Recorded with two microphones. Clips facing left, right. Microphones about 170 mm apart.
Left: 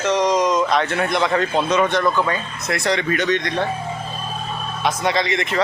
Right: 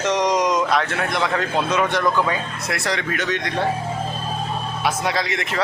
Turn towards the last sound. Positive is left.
turn(degrees=-5)  # may be behind; listen again after turning